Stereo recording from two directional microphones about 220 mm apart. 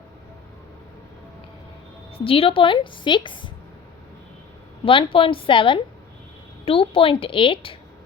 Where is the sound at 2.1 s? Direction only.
25° left (ahead or behind).